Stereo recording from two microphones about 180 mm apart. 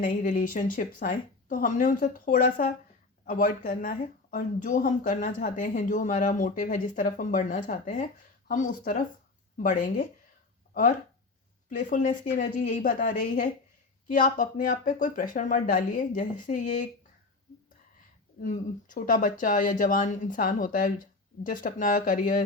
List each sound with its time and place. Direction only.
0.0 s speech: 45° left (ahead or behind)
11.8 s speech: 45° left (ahead or behind)
18.4 s speech: 50° left (ahead or behind)